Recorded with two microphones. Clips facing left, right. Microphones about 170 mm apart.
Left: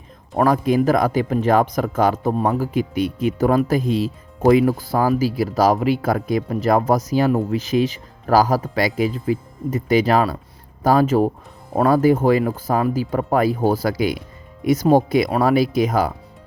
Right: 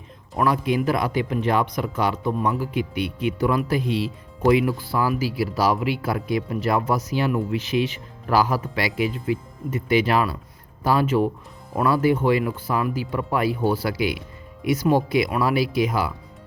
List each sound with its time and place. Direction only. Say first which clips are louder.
0.3 s speech: left 5 dB; 45° left (ahead or behind)